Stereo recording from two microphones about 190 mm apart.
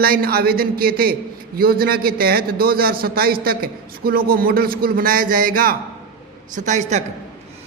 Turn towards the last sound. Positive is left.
turn(degrees=-40)  # may be behind; listen again after turning